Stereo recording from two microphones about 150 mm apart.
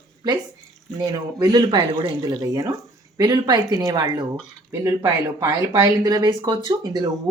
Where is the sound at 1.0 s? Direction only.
25° right (ahead or behind).